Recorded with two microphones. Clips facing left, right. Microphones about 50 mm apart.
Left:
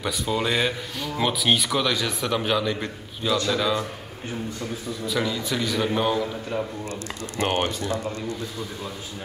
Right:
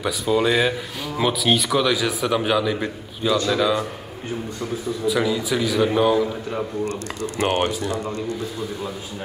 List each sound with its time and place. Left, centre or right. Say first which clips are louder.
0.0 s speech: right 5 dB; centre
5.0 s speech: right 5 dB; centre